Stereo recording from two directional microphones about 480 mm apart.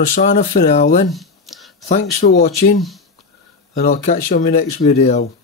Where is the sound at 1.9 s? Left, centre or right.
Centre.